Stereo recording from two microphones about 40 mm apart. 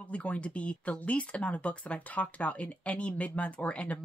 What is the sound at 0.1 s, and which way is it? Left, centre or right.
Speech, left.